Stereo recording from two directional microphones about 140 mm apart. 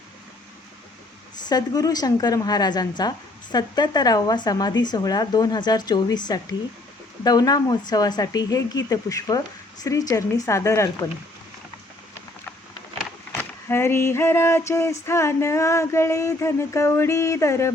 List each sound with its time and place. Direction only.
1.5 s a woman's voice: 25° left (ahead or behind)
13.3 s a woman's voice: 15° left (ahead or behind)